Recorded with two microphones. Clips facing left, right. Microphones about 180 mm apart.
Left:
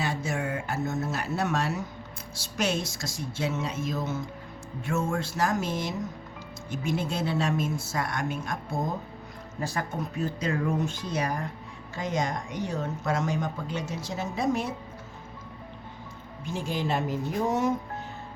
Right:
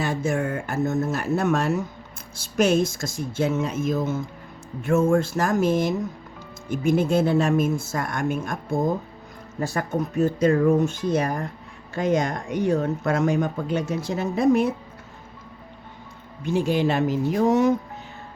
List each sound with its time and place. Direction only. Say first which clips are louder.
0.0 s speech: right 6 dB; 50° right (ahead or behind)
16.4 s speech: right 9 dB; 65° right (ahead or behind); by 17.7 s 85° right